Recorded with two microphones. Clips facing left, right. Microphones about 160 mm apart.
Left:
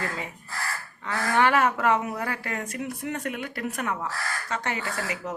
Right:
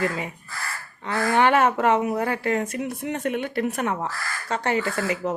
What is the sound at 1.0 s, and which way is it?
Speech, 20° right (ahead or behind).